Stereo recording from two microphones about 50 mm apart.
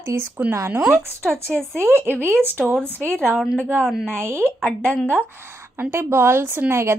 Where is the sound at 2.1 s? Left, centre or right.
Left.